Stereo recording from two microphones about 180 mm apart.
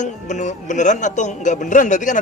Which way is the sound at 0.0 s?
45° left (ahead or behind).